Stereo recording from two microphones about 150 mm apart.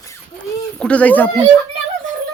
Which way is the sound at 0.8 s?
10° left (ahead or behind).